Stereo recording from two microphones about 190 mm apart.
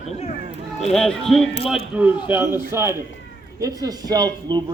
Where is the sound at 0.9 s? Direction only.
5° left (ahead or behind).